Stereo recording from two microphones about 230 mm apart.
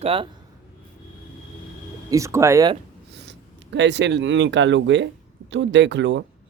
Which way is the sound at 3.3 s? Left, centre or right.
Right.